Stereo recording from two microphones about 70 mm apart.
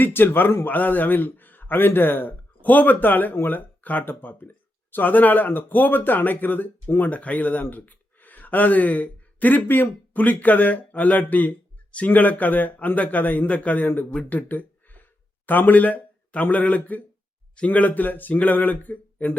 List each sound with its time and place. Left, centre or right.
0.0 s a man's voice: left